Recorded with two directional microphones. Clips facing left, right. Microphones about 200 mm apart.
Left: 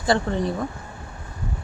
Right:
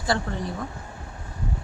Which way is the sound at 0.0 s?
20° left (ahead or behind).